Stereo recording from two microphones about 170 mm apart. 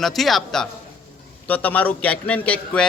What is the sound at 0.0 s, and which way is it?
A man's voice, centre (ahead or behind).